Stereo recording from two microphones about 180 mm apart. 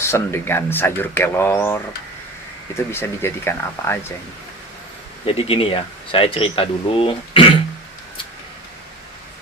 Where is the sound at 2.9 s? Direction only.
15° left (ahead or behind).